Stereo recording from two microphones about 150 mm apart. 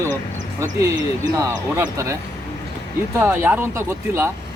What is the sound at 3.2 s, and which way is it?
Speech, 15° right (ahead or behind).